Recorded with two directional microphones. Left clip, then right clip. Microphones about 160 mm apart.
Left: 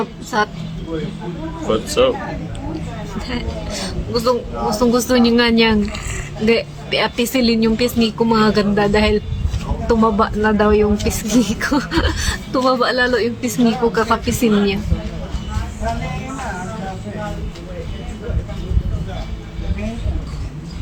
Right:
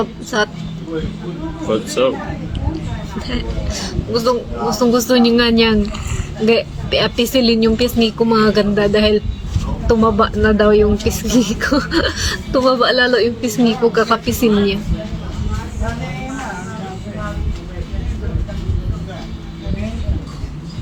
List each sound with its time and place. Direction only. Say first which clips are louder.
0.0 s speech: right 1 dB; 5° left (ahead or behind)
1.7 s a man's voice: left 1 dB; 35° left (ahead or behind)
3.2 s a man's voice: right 1 dB; 10° left (ahead or behind)